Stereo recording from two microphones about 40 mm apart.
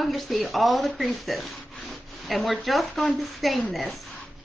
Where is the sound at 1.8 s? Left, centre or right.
Centre.